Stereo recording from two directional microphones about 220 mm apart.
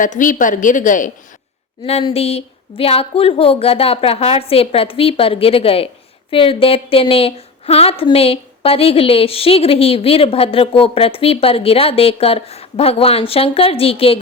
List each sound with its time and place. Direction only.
0.0 s a woman's voice: 35° left (ahead or behind)
1.8 s a woman's voice: 25° left (ahead or behind)